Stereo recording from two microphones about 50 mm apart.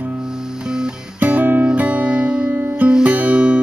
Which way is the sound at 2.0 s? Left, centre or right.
Centre.